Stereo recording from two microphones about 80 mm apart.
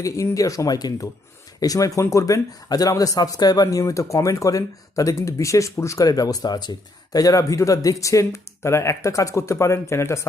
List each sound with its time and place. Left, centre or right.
0.3 s speech: left